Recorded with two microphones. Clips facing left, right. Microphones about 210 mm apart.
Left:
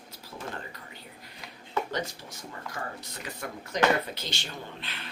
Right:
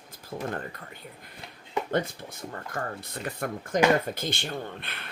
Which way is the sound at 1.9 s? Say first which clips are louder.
Right 6 dB; 55° right (ahead or behind).